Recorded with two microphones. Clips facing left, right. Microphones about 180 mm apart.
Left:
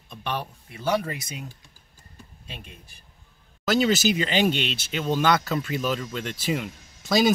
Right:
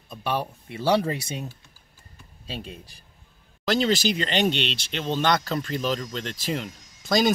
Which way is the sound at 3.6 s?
5° left (ahead or behind).